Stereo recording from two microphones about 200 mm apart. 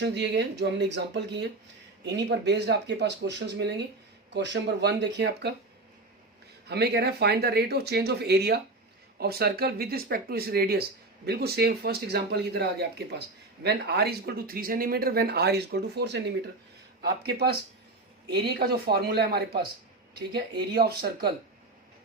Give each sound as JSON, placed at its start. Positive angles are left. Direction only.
{"t": 0.0, "sound": "speech", "side_deg": -60}
{"t": 6.7, "sound": "speech", "side_deg": -55}